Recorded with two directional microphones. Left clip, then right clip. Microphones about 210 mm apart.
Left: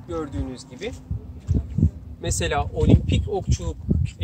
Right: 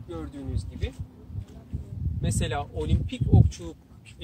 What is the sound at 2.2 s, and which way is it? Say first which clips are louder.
Speech: left 7 dB; 5° left (ahead or behind).